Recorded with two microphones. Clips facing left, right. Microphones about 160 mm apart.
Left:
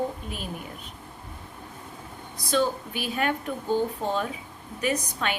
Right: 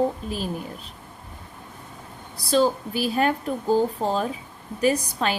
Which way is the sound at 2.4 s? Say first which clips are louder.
Right 5 dB; 30° right (ahead or behind).